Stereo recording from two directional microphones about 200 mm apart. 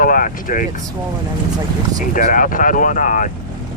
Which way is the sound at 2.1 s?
40° left (ahead or behind).